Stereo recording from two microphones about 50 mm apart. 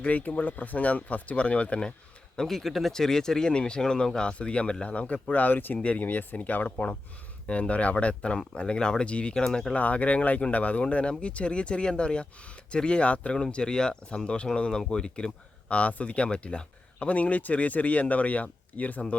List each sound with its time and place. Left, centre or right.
0.0 s speech: left
2.3 s speech: centre
9.7 s speech: left